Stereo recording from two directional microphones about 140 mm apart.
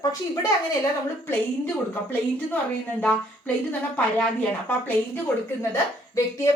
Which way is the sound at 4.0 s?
10° left (ahead or behind).